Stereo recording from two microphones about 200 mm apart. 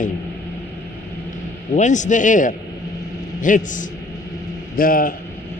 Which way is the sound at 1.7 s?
40° left (ahead or behind).